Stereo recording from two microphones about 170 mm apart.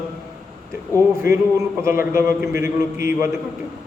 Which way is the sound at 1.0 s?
15° right (ahead or behind).